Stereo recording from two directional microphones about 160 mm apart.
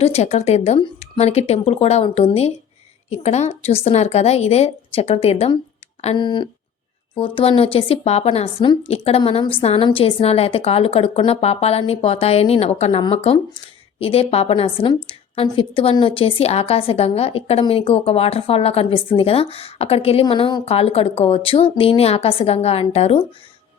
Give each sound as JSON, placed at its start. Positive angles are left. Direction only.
{"t": 0.0, "sound": "a woman's voice", "side_deg": 40}